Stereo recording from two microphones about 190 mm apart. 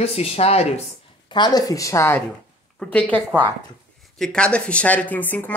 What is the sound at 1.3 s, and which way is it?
Speech, 20° left (ahead or behind).